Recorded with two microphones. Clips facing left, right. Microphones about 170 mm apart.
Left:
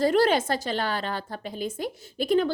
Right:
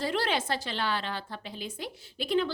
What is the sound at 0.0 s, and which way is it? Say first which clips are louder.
A woman's voice: left 9 dB; 45° left (ahead or behind).